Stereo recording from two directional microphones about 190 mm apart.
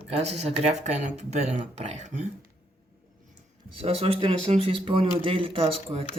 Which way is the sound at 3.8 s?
35° right (ahead or behind).